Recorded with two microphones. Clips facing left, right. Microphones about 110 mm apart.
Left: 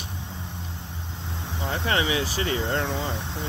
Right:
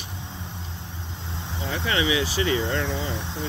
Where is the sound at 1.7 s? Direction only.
40° left (ahead or behind).